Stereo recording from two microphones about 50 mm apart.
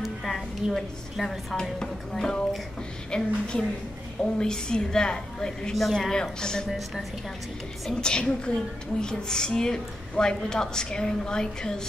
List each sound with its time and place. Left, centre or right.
0.0 s a woman's voice: centre
7.9 s a woman's voice: centre